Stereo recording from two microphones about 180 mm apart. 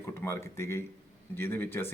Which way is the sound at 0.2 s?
15° left (ahead or behind).